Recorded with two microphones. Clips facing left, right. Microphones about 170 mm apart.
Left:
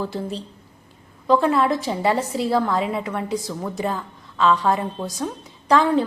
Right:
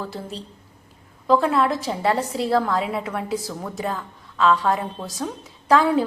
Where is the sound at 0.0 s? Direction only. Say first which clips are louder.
Left 5 dB; centre (ahead or behind).